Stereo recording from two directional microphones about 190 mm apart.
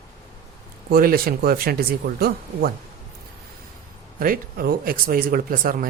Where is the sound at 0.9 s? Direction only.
50° right (ahead or behind).